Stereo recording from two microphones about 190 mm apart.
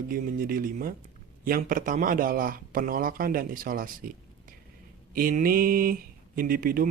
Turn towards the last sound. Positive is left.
turn(degrees=-50)  # may be behind; listen again after turning